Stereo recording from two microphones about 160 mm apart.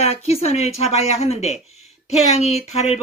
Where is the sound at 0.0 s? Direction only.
40° left (ahead or behind).